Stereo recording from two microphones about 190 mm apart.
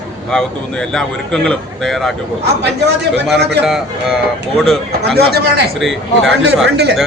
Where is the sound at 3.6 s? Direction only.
Centre (ahead or behind).